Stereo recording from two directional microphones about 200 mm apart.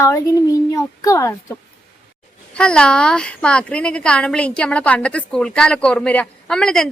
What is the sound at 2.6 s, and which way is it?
A woman's voice, 5° left (ahead or behind).